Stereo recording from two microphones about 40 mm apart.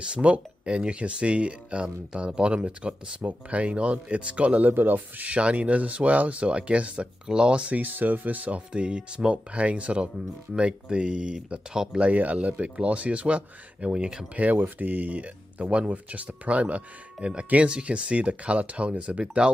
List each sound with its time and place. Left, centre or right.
0.0 s speech: right
3.2 s speech: right
4.6 s speech: right
5.2 s speech: right
7.7 s speech: right
8.7 s speech: right
12.0 s speech: right
14.3 s speech: right
14.6 s speech: right
17.6 s speech: right